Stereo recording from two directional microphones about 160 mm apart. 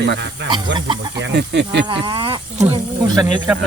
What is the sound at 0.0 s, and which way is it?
Speech, 90° right.